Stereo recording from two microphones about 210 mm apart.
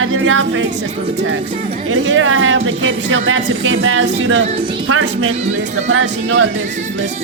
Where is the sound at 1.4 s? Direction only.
25° right (ahead or behind).